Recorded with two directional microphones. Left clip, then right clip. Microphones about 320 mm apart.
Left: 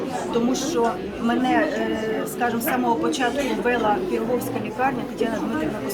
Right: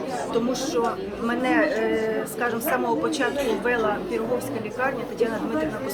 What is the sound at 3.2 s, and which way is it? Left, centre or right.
Speech, centre.